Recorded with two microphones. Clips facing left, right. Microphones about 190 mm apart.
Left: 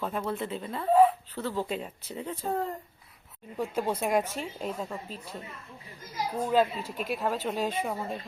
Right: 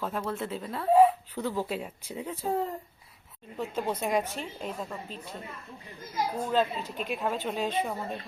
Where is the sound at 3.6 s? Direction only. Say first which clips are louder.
Left 2 dB; 10° left (ahead or behind).